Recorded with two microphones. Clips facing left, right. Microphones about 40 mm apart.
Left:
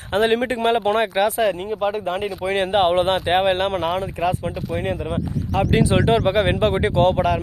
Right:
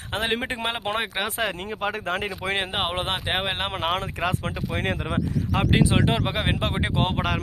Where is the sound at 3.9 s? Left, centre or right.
Right.